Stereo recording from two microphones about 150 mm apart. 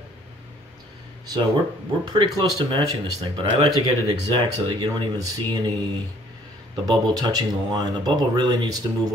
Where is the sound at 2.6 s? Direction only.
30° right (ahead or behind).